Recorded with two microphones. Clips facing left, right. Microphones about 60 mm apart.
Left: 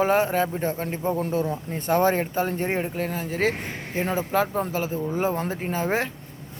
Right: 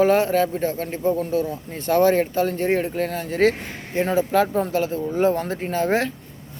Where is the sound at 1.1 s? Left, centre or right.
Left; by 6.1 s centre.